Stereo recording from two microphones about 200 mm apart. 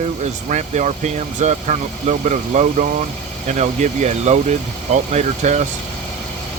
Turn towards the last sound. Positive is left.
turn(degrees=-35)  # may be behind; listen again after turning